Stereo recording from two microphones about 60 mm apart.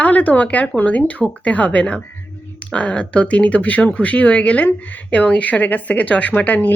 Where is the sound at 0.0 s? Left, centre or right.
Left.